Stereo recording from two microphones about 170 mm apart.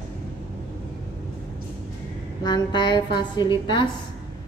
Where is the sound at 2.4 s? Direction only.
25° left (ahead or behind).